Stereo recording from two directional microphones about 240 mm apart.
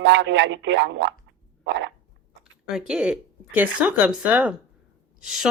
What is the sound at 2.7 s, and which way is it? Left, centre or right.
A woman's voice, centre.